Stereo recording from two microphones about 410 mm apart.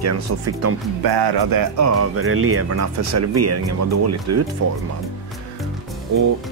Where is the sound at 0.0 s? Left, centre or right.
Right.